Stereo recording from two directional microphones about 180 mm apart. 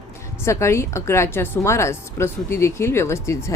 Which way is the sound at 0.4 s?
15° left (ahead or behind).